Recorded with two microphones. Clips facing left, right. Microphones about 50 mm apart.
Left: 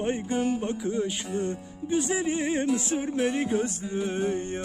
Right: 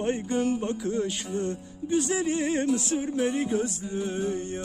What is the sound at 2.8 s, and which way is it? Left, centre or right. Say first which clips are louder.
Speech: even; left.